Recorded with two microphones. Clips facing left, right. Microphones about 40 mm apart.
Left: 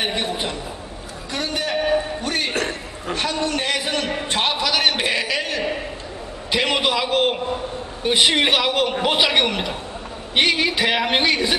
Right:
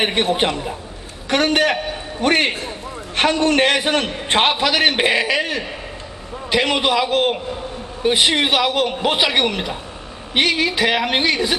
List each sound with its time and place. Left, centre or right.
0.0 s a man's voice: right; by 5.6 s centre
6.5 s a man's voice: centre